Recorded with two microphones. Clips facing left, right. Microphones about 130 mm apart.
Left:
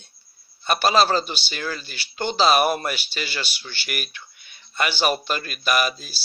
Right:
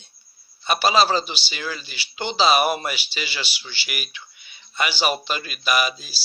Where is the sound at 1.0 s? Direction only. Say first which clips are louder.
Even; 50° left (ahead or behind).